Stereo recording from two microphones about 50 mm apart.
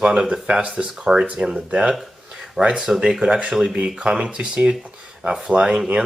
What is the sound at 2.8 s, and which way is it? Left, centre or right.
Speech, centre.